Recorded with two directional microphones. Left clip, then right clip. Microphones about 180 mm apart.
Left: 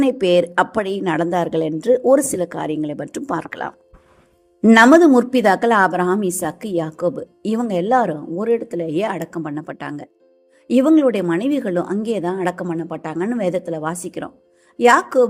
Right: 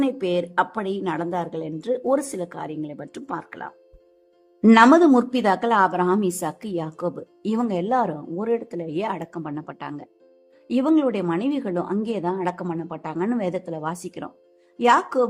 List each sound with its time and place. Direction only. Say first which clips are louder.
0.0 s a woman's voice: left 8 dB; 20° left (ahead or behind)
4.7 s speech: left 4 dB; 10° left (ahead or behind)